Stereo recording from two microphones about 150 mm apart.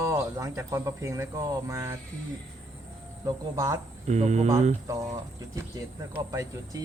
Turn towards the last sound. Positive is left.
turn(degrees=-25)  # may be behind; listen again after turning